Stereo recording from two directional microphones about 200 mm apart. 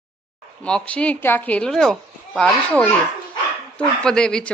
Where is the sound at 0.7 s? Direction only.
5° left (ahead or behind).